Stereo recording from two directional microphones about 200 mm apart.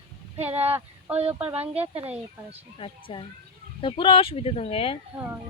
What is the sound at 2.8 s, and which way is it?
A woman's voice, 25° left (ahead or behind).